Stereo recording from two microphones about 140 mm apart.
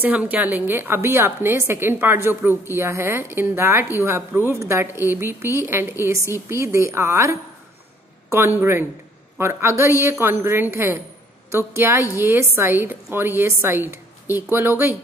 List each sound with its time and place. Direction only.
0.0 s a woman's voice: 10° right (ahead or behind)
8.5 s a woman's voice: 15° right (ahead or behind)